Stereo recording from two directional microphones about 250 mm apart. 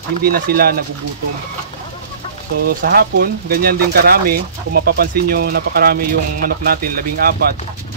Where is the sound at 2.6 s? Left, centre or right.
Right.